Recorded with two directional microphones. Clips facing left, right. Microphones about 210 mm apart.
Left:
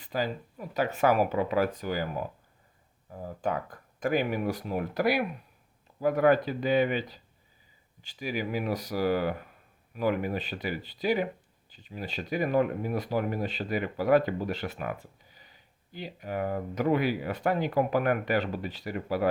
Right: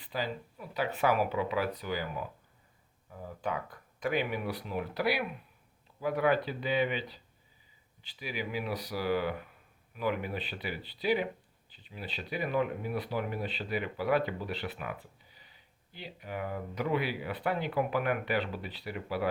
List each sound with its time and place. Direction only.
0.0 s speech: 45° left (ahead or behind)